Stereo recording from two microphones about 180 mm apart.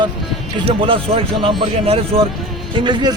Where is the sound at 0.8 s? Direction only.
30° right (ahead or behind).